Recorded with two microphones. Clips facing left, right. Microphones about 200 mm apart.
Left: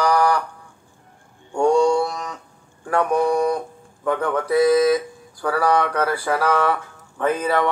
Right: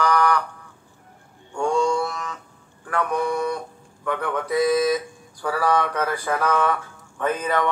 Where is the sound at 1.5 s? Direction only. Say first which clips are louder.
Left 5 dB; 40° left (ahead or behind).